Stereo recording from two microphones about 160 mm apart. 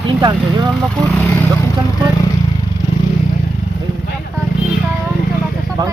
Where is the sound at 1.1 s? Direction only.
10° left (ahead or behind).